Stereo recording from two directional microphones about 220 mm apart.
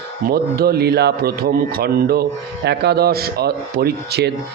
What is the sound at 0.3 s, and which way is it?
Speech, 45° right (ahead or behind).